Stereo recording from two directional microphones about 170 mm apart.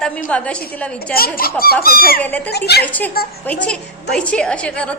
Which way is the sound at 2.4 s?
70° left (ahead or behind).